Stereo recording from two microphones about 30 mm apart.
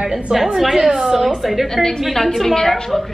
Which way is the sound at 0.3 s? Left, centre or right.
Right.